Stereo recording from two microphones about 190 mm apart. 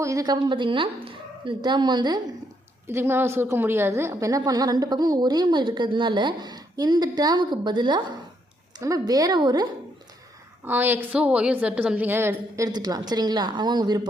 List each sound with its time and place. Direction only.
0.0 s a woman's voice: 15° right (ahead or behind)
2.8 s a woman's voice: 10° right (ahead or behind)
10.7 s a woman's voice: 10° right (ahead or behind)